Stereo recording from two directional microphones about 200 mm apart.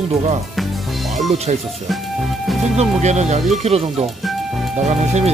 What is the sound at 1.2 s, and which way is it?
Speech, 35° right (ahead or behind).